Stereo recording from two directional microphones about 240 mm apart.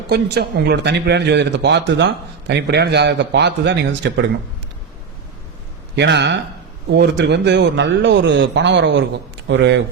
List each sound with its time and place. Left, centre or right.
0.1 s speech: right
6.0 s speech: right